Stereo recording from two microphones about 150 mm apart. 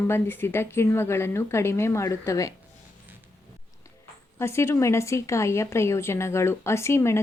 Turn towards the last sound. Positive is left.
turn(degrees=15)  # may be behind; listen again after turning